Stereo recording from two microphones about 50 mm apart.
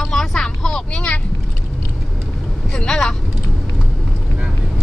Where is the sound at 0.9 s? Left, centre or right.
Left.